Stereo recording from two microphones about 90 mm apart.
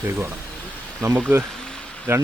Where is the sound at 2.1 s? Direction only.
25° right (ahead or behind).